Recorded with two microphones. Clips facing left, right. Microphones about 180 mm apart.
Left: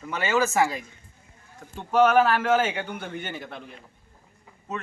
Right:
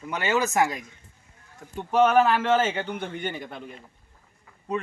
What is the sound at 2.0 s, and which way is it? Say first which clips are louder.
Speech: even; 5° left (ahead or behind).